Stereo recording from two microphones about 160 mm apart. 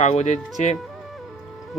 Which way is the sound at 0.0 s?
45° left (ahead or behind).